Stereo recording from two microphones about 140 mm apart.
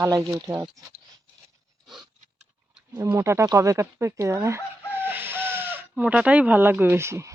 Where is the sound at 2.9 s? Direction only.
20° right (ahead or behind).